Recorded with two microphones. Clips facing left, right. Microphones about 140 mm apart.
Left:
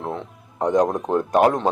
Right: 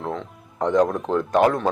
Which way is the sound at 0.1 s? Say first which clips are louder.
Even; 15° left (ahead or behind).